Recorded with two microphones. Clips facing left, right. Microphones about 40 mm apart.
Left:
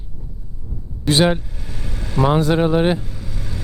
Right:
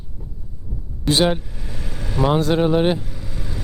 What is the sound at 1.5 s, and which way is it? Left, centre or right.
Vehicle, right.